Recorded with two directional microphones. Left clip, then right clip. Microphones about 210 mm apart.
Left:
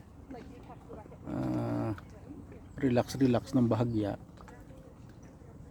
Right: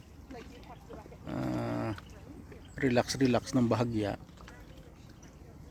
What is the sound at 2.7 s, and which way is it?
Speech, 5° right (ahead or behind).